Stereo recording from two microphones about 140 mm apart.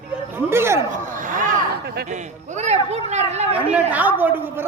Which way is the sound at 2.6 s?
55° right (ahead or behind).